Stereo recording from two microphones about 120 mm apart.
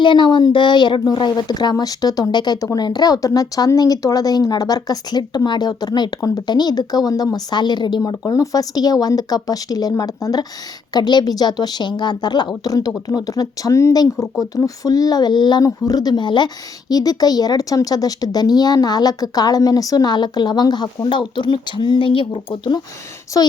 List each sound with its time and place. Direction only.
0.0 s speech: 40° left (ahead or behind)
23.3 s a woman's voice: 30° left (ahead or behind)